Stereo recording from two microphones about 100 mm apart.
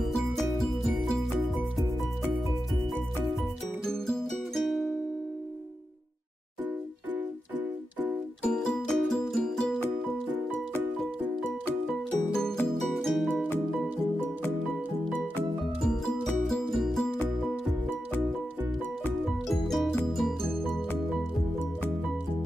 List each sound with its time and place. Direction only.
0.0 s music: centre (ahead or behind)
3.3 s music: 5° left (ahead or behind)
6.6 s music: 15° right (ahead or behind)
8.5 s music: 5° left (ahead or behind)
11.9 s music: 5° left (ahead or behind)
15.8 s music: 5° left (ahead or behind)
19.2 s music: centre (ahead or behind)